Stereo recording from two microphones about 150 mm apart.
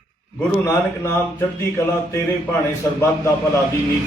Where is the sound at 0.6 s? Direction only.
20° left (ahead or behind).